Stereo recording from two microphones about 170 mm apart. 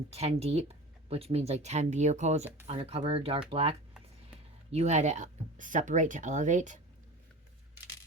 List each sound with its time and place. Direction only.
0.1 s speech: 35° right (ahead or behind)